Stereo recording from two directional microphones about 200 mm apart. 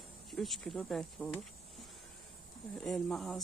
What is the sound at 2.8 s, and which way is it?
Speech, centre (ahead or behind).